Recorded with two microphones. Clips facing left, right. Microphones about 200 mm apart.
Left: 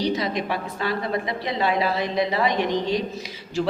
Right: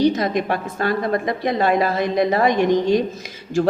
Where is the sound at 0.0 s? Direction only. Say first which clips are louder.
Right 6 dB; 50° right (ahead or behind).